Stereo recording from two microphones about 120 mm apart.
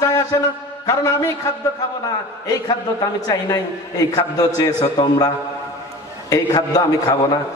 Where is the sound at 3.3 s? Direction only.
30° left (ahead or behind).